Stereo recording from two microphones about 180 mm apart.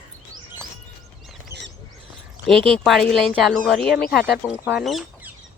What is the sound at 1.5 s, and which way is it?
Bird, 15° right (ahead or behind).